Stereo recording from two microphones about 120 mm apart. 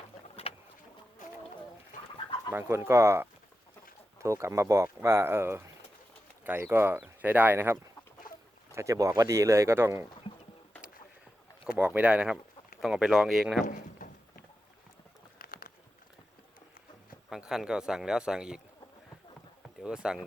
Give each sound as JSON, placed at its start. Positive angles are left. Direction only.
{"t": 0.4, "sound": "vehicle", "side_deg": 50}
{"t": 1.9, "sound": "bird", "side_deg": 90}
{"t": 2.5, "sound": "speech", "side_deg": -20}
{"t": 11.8, "sound": "a man's voice", "side_deg": -10}
{"t": 13.7, "sound": "drawer open or close", "side_deg": 90}
{"t": 17.2, "sound": "a man's voice", "side_deg": -5}
{"t": 19.8, "sound": "a man's voice", "side_deg": -5}